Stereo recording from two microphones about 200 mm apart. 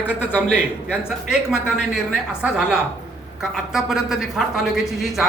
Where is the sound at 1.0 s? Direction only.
5° right (ahead or behind).